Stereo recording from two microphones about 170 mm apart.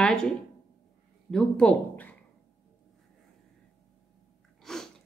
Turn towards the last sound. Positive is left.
turn(degrees=0)  # may be behind; listen again after turning